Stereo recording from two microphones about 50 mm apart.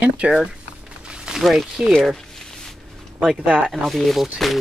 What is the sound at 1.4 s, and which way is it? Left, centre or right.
Speech, centre.